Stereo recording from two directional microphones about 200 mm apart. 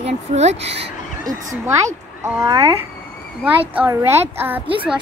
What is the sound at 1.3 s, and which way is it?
A woman's voice, 15° right (ahead or behind).